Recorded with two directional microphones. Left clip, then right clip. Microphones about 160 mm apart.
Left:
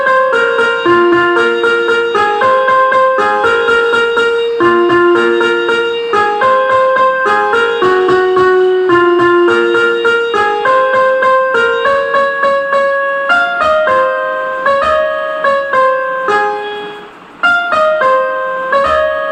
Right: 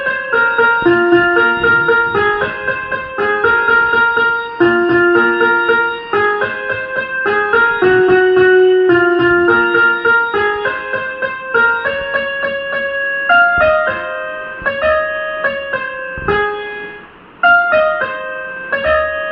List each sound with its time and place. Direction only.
0.6 s keyboard: 15° right (ahead or behind)
5.1 s music: 10° right (ahead or behind)
9.5 s music: 15° right (ahead or behind)